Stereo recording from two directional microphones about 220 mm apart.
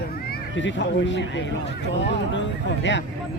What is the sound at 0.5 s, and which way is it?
Speech, 55° left (ahead or behind).